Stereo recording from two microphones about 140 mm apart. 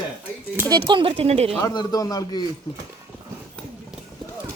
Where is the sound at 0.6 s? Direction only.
30° right (ahead or behind); by 1.5 s 50° right (ahead or behind).